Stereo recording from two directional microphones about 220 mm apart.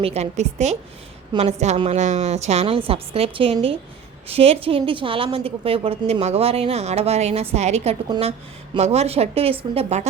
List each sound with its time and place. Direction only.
0.0 s a woman's voice: 30° right (ahead or behind)